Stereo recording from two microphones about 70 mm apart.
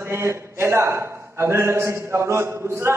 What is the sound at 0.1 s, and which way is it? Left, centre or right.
A man's voice, right.